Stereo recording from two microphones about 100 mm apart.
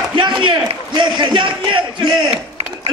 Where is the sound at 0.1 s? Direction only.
55° right (ahead or behind).